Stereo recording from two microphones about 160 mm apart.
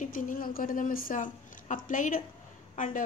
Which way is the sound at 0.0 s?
55° left (ahead or behind).